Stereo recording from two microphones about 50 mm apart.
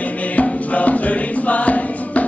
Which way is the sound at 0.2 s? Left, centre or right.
Left.